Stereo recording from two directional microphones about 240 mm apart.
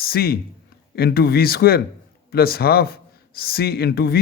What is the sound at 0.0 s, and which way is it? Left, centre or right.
Speech, left.